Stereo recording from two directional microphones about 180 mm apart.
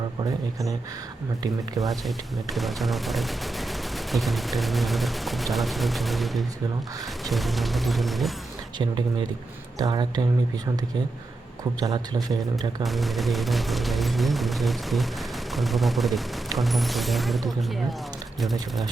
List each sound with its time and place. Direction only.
1.8 s speech: centre (ahead or behind)
8.8 s a man's voice: 25° right (ahead or behind)
11.8 s a man's voice: 20° right (ahead or behind)
12.8 s speech: centre (ahead or behind)